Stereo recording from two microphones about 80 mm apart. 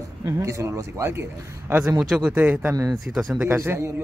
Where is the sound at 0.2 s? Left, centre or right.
Right.